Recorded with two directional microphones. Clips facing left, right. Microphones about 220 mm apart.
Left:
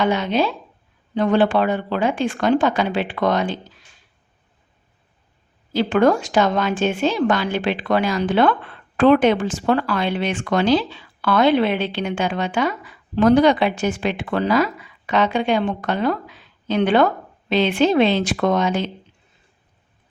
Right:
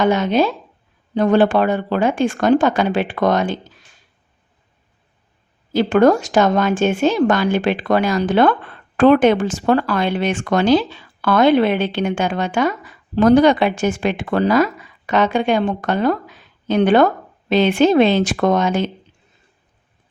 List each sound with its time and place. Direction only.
0.0 s speech: 45° right (ahead or behind)
5.7 s speech: 45° right (ahead or behind)